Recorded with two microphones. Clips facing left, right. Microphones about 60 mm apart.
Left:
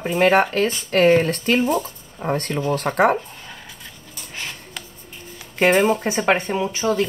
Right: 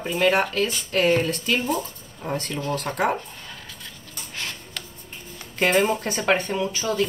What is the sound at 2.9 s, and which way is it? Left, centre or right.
Speech, left.